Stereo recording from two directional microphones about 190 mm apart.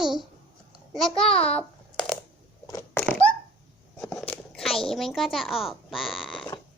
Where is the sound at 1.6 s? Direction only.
5° left (ahead or behind).